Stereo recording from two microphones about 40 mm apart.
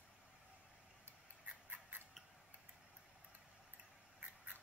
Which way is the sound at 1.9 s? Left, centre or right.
Right.